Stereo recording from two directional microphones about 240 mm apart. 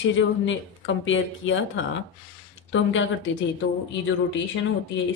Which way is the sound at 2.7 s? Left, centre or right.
Left.